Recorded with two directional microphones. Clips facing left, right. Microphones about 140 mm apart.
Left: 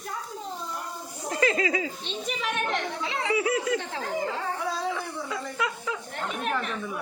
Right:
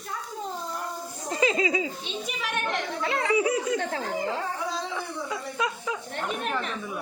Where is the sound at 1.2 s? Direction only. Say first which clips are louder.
Even; 15° right (ahead or behind).